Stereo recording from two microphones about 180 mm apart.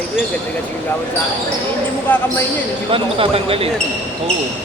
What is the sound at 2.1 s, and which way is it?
Speech, 10° left (ahead or behind).